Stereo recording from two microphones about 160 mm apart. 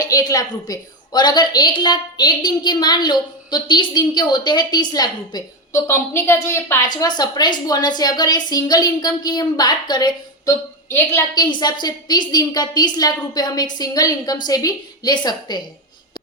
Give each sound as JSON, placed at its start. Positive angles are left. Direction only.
{"t": 0.0, "sound": "a woman's voice", "side_deg": 20}